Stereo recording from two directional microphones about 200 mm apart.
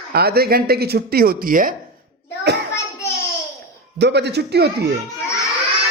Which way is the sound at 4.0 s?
55° right (ahead or behind).